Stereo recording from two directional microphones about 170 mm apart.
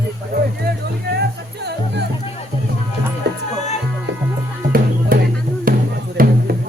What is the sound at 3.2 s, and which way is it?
Music, 80° right.